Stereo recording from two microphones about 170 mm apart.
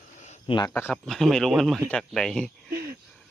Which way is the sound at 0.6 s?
10° left (ahead or behind).